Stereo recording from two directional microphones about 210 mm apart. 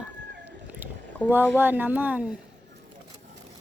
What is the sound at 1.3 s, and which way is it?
Speech, 10° right (ahead or behind).